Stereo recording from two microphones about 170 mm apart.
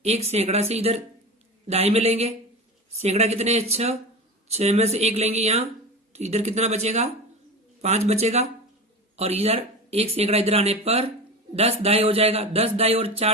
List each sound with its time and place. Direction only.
0.0 s speech: 40° right (ahead or behind)